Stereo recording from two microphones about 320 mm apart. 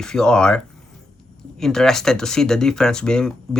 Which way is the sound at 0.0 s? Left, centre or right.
Centre.